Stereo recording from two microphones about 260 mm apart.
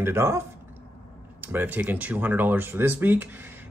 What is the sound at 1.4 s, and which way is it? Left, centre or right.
Speech, centre.